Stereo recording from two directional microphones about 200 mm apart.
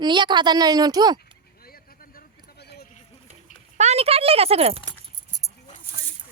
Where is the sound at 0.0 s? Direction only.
20° right (ahead or behind).